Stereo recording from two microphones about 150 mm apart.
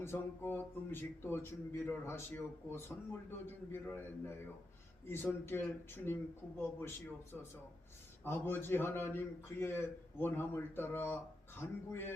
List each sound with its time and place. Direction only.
0.0 s a man's voice: 15° left (ahead or behind)
8.2 s a man's voice: 15° left (ahead or behind)